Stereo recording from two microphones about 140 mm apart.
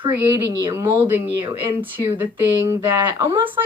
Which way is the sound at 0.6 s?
20° right (ahead or behind).